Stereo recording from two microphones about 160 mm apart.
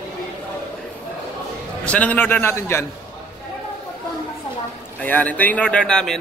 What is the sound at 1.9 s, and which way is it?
Speech, 10° left (ahead or behind).